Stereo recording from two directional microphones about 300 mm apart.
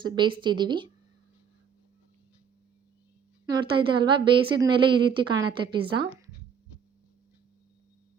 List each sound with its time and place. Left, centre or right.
0.0 s a woman's voice: centre
3.5 s a woman's voice: centre